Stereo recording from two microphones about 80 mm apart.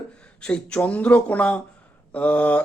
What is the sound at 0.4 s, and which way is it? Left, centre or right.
Speech, centre.